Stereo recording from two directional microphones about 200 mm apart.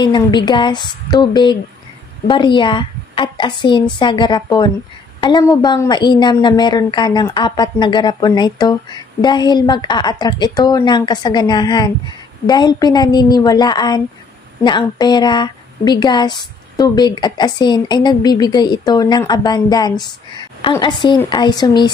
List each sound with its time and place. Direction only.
0.0 s a woman's voice: 20° left (ahead or behind)